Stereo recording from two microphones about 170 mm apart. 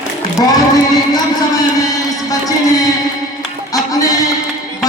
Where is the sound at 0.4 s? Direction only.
20° left (ahead or behind).